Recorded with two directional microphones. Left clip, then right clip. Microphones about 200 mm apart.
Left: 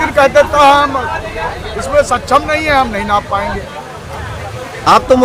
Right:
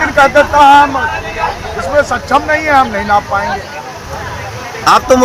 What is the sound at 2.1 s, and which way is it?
Speech, 35° left (ahead or behind).